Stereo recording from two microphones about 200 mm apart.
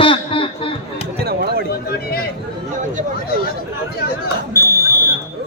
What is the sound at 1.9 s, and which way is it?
Speech, 50° left (ahead or behind).